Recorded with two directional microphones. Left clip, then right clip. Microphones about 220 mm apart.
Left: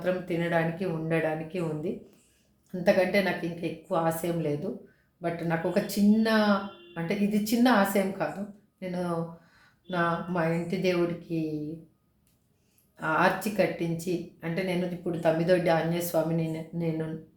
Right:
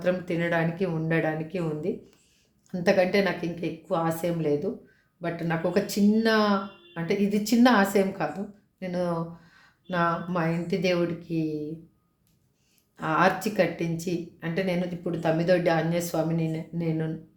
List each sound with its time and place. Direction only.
0.0 s speech: 40° right (ahead or behind)
13.0 s speech: 35° right (ahead or behind)